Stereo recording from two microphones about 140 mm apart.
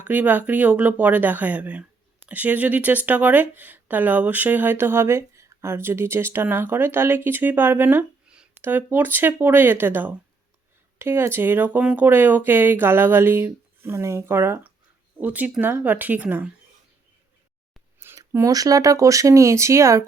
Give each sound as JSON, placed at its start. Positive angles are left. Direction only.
{"t": 0.0, "sound": "speech", "side_deg": -10}
{"t": 18.0, "sound": "a sound", "side_deg": -20}
{"t": 18.3, "sound": "speech", "side_deg": -20}